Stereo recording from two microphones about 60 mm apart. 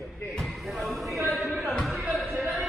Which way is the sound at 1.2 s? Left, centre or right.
Centre.